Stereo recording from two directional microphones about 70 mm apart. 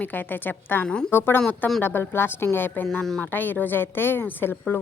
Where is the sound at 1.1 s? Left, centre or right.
Left.